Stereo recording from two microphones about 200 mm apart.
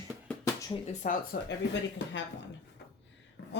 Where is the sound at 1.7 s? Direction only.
65° left (ahead or behind).